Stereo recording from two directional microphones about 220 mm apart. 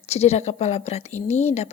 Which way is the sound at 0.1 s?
30° left (ahead or behind).